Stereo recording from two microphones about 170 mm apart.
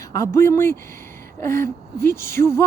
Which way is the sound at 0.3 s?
15° left (ahead or behind).